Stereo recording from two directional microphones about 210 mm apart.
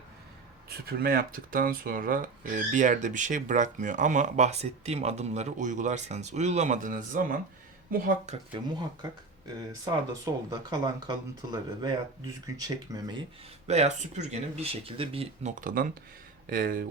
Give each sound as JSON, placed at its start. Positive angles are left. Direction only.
{"t": 0.7, "sound": "speech", "side_deg": -45}
{"t": 8.5, "sound": "speech", "side_deg": -20}
{"t": 13.7, "sound": "speech", "side_deg": -30}